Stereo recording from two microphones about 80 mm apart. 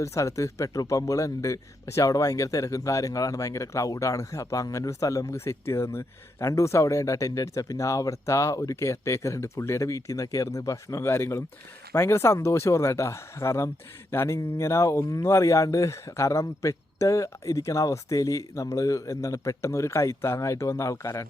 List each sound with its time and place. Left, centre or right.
0.0 s a man's voice: left